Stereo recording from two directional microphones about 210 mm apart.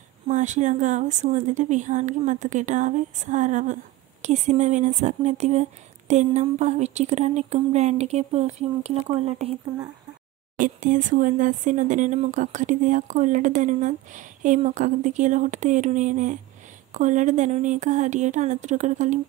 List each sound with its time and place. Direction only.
0.3 s speech: 35° right (ahead or behind)
10.6 s speech: 35° right (ahead or behind)